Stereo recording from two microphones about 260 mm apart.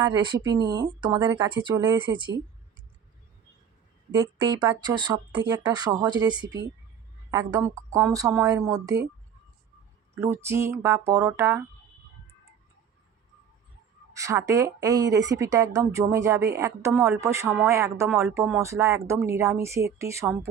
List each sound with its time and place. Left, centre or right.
0.0 s a woman's voice: centre
4.6 s a woman's voice: centre
10.2 s a woman's voice: centre
14.1 s a woman's voice: centre